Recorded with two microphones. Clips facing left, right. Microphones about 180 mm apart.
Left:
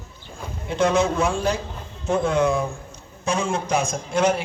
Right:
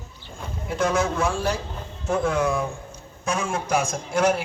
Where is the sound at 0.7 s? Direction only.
25° left (ahead or behind).